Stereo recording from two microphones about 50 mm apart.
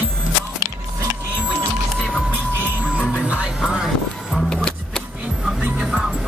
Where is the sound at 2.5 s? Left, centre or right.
Right.